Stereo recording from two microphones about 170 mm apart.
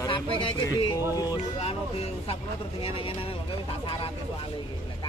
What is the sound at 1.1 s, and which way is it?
Music, 25° left (ahead or behind).